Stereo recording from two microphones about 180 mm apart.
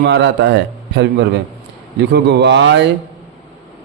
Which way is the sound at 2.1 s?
70° right (ahead or behind).